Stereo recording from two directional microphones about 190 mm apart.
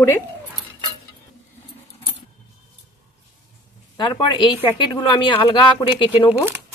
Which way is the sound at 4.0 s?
25° left (ahead or behind).